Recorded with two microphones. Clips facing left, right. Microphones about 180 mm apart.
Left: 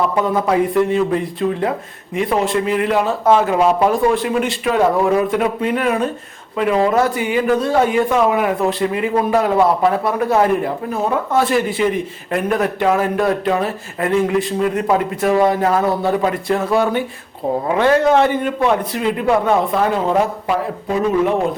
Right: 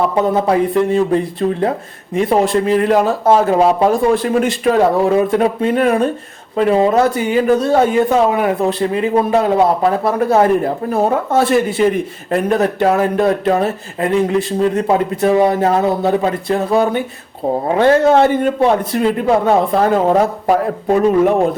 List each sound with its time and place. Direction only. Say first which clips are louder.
0.2 s a man's voice: right 3 dB; 30° right (ahead or behind)
10.9 s speech: right 5 dB; 45° right (ahead or behind)
11.3 s a man's voice: right 3 dB; 30° right (ahead or behind); by 21.3 s 45° right (ahead or behind)